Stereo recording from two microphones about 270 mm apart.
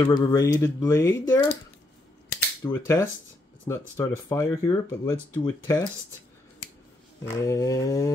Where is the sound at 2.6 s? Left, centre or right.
Centre.